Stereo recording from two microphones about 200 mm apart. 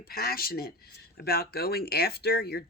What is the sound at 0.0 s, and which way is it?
Speech, 50° left (ahead or behind).